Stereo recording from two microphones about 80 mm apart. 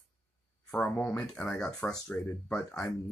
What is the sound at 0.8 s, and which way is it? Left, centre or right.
Speech, centre.